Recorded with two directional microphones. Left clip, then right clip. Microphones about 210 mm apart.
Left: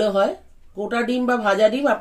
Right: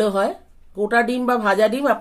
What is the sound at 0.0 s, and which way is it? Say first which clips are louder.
A woman's voice: left 1 dB; 55° right (ahead or behind).